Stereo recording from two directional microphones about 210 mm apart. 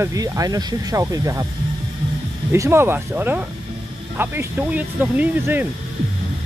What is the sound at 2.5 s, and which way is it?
Speech, 10° right (ahead or behind).